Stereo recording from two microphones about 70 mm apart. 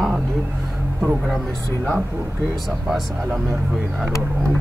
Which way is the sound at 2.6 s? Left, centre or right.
Centre.